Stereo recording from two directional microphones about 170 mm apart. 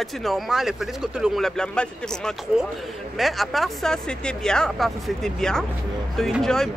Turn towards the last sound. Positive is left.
turn(degrees=0)  # may be behind; listen again after turning